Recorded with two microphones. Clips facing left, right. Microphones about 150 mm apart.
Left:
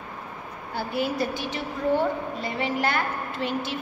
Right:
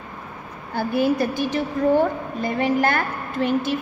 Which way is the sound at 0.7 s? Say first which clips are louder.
Right 6 dB; 50° right (ahead or behind).